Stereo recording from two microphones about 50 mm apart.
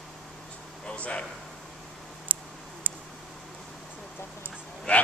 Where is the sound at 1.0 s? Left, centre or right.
Left.